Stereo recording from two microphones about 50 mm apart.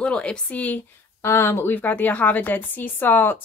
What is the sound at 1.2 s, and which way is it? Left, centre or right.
Speech, left.